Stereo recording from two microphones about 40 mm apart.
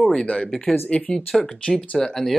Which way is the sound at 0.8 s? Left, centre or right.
Left.